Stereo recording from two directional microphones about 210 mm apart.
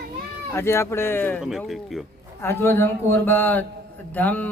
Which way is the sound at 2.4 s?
10° left (ahead or behind).